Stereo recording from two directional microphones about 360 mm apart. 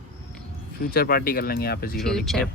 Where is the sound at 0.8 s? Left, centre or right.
Left.